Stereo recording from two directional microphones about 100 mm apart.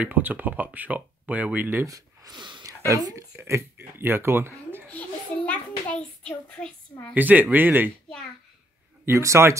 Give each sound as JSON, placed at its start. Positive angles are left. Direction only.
{"t": 0.0, "sound": "speech", "side_deg": -15}
{"t": 1.9, "sound": "a sound", "side_deg": -40}
{"t": 2.9, "sound": "speech", "side_deg": -35}
{"t": 4.8, "sound": "a sound", "side_deg": 15}
{"t": 7.2, "sound": "speech", "side_deg": -15}
{"t": 9.0, "sound": "speech", "side_deg": -30}